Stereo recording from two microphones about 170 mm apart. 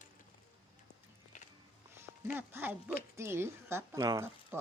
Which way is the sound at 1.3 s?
45° left (ahead or behind).